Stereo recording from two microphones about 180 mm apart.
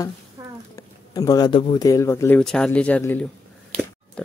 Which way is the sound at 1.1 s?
20° left (ahead or behind).